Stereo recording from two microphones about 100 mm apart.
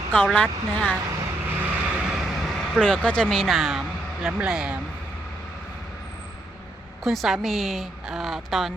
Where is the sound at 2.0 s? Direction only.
5° right (ahead or behind).